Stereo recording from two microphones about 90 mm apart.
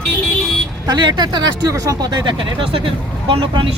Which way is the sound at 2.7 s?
80° right.